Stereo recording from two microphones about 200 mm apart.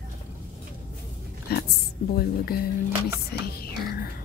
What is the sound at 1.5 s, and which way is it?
A woman's voice, 50° left (ahead or behind).